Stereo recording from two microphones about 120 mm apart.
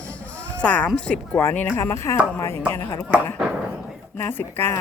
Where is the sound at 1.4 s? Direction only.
20° left (ahead or behind).